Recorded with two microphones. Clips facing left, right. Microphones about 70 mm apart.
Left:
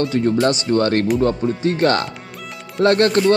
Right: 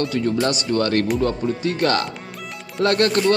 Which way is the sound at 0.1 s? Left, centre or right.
Left.